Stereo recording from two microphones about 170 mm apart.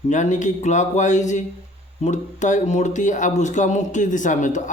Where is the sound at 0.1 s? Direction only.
45° left (ahead or behind).